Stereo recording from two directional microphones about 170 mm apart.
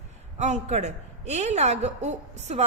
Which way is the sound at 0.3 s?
45° right (ahead or behind).